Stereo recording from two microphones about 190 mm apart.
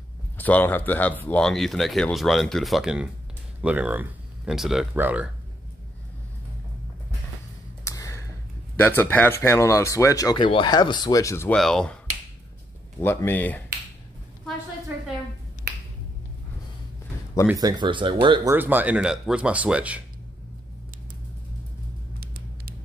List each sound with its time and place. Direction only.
0.4 s speech: 10° left (ahead or behind); by 5.3 s 10° right (ahead or behind)
7.8 s a sound: 15° left (ahead or behind)
8.7 s speech: 10° left (ahead or behind)
13.0 s speech: 10° left (ahead or behind)
17.6 s speech: 20° right (ahead or behind)
18.5 s speech: 10° right (ahead or behind)
22.2 s vehicle: 50° right (ahead or behind)